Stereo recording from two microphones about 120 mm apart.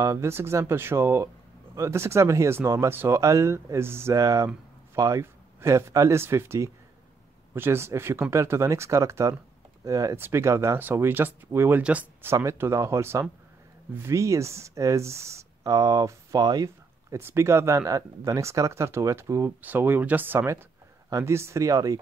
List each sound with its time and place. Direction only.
0.0 s speech: 25° right (ahead or behind)